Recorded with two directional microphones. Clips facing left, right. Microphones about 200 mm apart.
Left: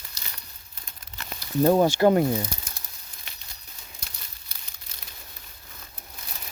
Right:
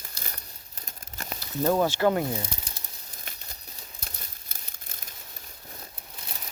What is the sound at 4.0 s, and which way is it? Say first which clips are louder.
Crumpling: right 3 dB; 50° right (ahead or behind).